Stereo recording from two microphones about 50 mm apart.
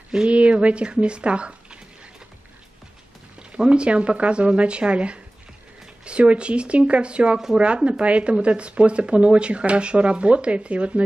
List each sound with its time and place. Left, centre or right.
0.1 s speech: right
3.5 s speech: centre